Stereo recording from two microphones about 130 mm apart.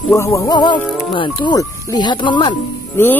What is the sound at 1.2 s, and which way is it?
Speech, 35° left (ahead or behind).